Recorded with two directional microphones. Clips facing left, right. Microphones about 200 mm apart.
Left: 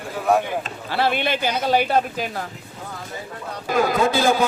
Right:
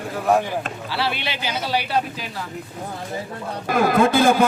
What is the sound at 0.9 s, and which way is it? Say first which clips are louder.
Speech: left 7 dB; 50° left (ahead or behind).